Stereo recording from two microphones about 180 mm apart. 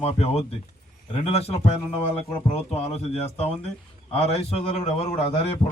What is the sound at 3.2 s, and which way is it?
Speech, 35° left (ahead or behind).